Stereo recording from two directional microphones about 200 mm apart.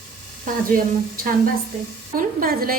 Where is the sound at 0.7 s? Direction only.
45° right (ahead or behind).